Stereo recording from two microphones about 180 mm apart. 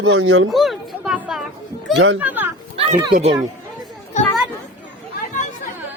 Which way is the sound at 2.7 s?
35° right (ahead or behind).